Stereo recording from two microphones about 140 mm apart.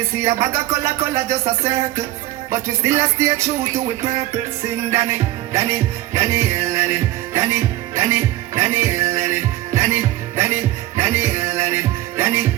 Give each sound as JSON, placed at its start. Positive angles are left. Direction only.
{"t": 0.2, "sound": "music", "side_deg": -20}